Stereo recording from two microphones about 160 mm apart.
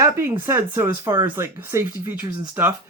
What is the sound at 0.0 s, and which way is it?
Speech, 15° right (ahead or behind).